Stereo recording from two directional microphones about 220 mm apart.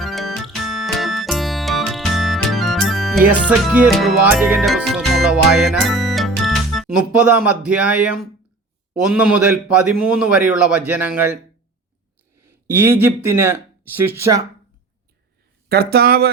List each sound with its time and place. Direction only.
0.0 s music: centre (ahead or behind)
3.4 s a man's voice: 5° right (ahead or behind)
4.9 s music: centre (ahead or behind)
8.9 s a man's voice: 5° right (ahead or behind)
12.5 s speech: 10° right (ahead or behind)
15.7 s speech: 45° right (ahead or behind)